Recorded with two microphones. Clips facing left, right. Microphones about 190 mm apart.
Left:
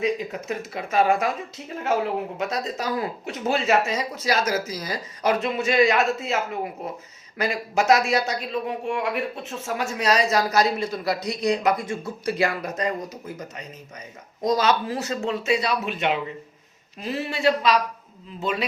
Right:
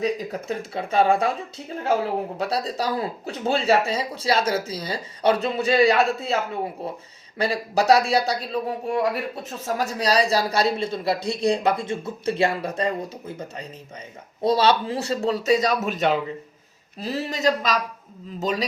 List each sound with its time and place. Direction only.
0.0 s speech: 35° right (ahead or behind)
2.4 s speech: 35° right (ahead or behind)